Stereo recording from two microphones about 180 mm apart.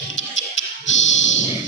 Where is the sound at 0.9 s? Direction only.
90° left.